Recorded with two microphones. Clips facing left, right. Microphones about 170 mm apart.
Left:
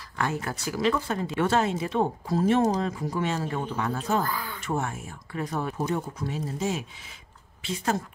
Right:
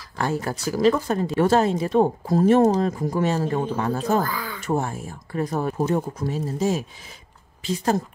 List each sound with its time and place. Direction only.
0.2 s speech: 35° right (ahead or behind)
4.2 s speech: 90° right
4.6 s speech: 35° right (ahead or behind)